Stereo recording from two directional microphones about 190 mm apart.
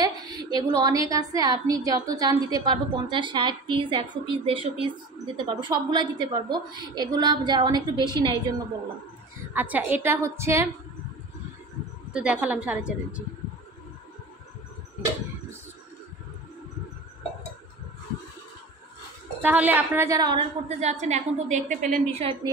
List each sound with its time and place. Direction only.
0.0 s a sound: 20° right (ahead or behind)
1.1 s a woman's voice: 20° right (ahead or behind)
9.5 s a woman's voice: 10° right (ahead or behind)
12.1 s a woman's voice: 5° right (ahead or behind)
19.4 s a woman's voice: 10° right (ahead or behind)
20.6 s a woman's voice: 35° right (ahead or behind)